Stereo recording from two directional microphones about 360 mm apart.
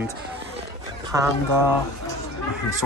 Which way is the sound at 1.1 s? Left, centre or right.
Centre.